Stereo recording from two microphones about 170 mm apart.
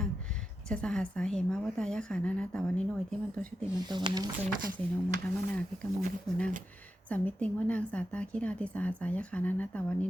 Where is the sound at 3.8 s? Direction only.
25° right (ahead or behind).